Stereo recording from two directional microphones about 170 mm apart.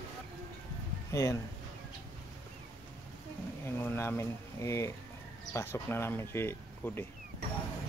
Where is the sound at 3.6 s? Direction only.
15° left (ahead or behind).